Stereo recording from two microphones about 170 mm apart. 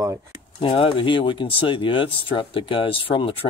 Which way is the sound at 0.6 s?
30° left (ahead or behind).